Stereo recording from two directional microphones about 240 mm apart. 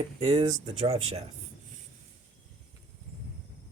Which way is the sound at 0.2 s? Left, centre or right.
Right.